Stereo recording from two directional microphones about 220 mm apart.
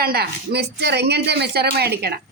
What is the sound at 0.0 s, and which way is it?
Speech, 45° right (ahead or behind).